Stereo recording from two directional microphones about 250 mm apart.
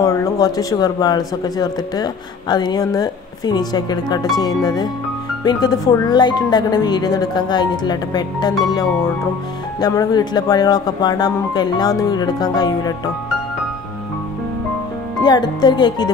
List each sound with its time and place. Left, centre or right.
0.0 s speech: centre
5.4 s speech: centre
15.2 s speech: centre